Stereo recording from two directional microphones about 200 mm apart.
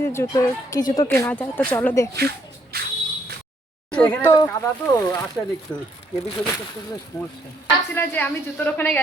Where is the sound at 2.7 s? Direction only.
50° right (ahead or behind).